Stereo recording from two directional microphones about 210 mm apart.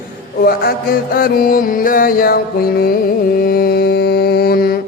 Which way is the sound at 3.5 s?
45° left (ahead or behind).